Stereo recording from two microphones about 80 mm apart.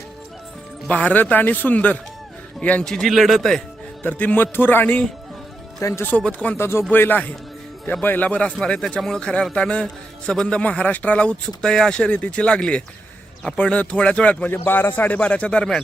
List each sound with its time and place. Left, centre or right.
0.9 s a man's voice: centre
2.8 s speech: centre
4.0 s a man's voice: centre
6.6 s a man's voice: left; by 15.8 s centre